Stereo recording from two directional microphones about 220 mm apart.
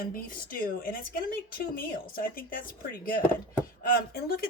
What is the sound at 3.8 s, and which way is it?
Speech, 45° left (ahead or behind).